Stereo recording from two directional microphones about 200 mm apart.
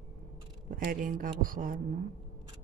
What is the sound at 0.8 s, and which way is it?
Speech, 45° right (ahead or behind).